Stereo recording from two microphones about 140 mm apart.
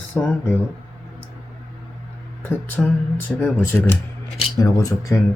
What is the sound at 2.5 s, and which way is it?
Speech, 10° left (ahead or behind).